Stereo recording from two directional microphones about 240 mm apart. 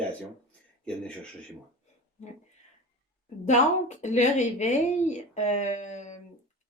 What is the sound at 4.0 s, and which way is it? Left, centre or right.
A woman's voice, left.